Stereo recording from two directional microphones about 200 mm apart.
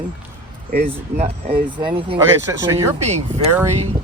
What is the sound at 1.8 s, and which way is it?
Speech, 25° right (ahead or behind).